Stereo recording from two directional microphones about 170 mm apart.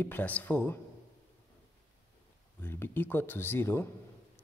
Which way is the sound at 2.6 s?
15° left (ahead or behind).